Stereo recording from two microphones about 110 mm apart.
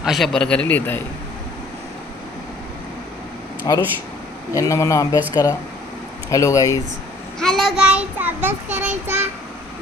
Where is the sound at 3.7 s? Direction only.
45° left (ahead or behind).